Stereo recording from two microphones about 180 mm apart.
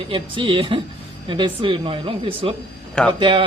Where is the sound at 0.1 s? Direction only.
30° right (ahead or behind).